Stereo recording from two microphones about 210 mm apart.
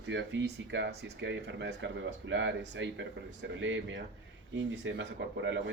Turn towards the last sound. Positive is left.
turn(degrees=-60)  # may be behind; listen again after turning